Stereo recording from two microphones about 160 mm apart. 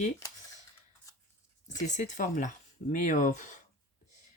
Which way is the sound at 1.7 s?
50° left (ahead or behind).